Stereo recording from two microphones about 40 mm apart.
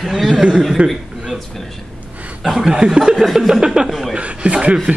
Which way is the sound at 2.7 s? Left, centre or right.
Right.